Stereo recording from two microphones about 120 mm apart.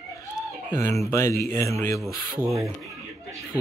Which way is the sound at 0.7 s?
25° left (ahead or behind).